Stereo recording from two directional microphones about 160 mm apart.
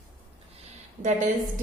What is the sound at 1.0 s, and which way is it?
Speech, 50° right (ahead or behind).